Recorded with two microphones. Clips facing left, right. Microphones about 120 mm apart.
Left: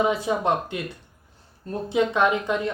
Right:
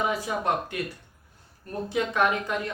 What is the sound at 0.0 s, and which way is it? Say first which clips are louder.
Speech: left 5 dB; 20° left (ahead or behind).